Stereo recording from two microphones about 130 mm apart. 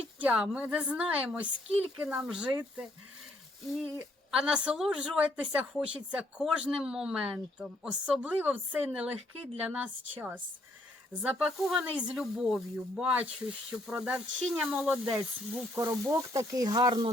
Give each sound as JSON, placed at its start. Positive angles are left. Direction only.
{"t": 0.2, "sound": "a woman's voice", "side_deg": -10}
{"t": 4.3, "sound": "a woman's voice", "side_deg": -5}
{"t": 15.7, "sound": "speech", "side_deg": -20}